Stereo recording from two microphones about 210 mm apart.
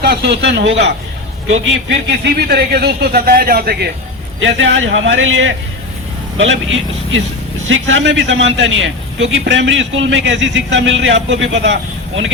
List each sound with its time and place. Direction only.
0.0 s speech: 50° right (ahead or behind)
4.4 s a man's voice: 65° right (ahead or behind)